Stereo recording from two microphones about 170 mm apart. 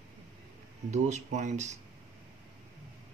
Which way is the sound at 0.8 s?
45° right (ahead or behind).